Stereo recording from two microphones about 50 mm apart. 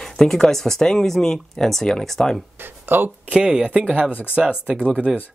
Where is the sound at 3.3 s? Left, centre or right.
Right.